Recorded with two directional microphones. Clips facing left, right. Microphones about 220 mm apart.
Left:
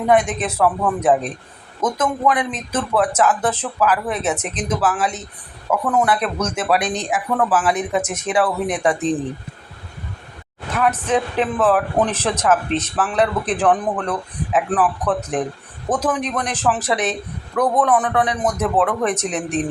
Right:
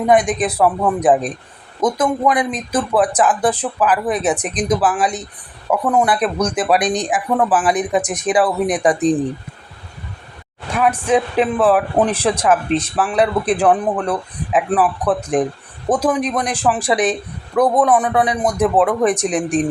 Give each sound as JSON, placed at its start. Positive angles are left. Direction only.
{"t": 0.1, "sound": "speech", "side_deg": -15}
{"t": 10.7, "sound": "speech", "side_deg": -10}